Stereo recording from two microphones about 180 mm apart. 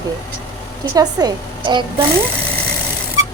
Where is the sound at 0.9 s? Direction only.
25° right (ahead or behind).